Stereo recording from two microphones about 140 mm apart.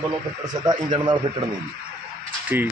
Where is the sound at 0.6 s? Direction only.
35° right (ahead or behind).